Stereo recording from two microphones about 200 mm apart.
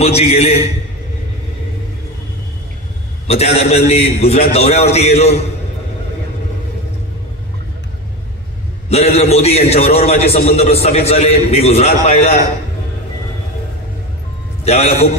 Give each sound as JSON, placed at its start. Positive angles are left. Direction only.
{"t": 0.0, "sound": "a man's voice", "side_deg": 30}
{"t": 3.3, "sound": "a man's voice", "side_deg": 30}
{"t": 8.8, "sound": "a man's voice", "side_deg": 30}
{"t": 14.6, "sound": "a man's voice", "side_deg": 30}